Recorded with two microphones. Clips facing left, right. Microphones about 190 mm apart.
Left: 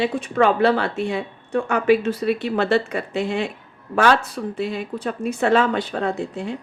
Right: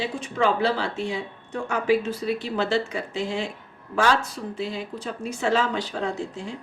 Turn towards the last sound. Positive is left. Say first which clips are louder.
# left 5 dB
turn(degrees=60)  # may be behind; listen again after turning